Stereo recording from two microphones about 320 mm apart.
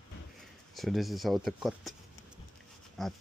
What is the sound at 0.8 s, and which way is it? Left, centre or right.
Speech, centre.